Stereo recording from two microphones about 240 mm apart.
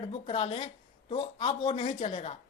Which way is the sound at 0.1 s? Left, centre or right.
Left.